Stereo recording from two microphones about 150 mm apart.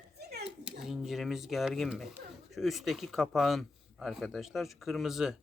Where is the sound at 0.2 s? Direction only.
90° right.